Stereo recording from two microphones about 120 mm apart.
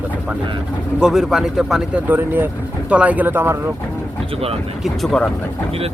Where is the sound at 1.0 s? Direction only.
Centre (ahead or behind); by 3.6 s 20° right (ahead or behind).